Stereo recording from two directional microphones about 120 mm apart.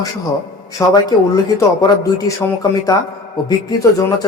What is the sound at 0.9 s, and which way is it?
A man's voice, 30° left (ahead or behind).